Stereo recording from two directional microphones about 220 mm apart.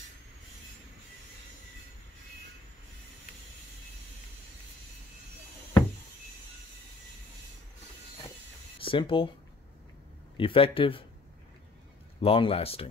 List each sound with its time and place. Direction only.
8.7 s speech: 25° left (ahead or behind)
10.3 s speech: 25° left (ahead or behind)
12.2 s speech: 25° left (ahead or behind)